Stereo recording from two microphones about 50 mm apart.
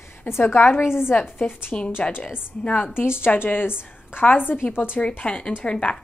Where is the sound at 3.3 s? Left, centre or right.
Left.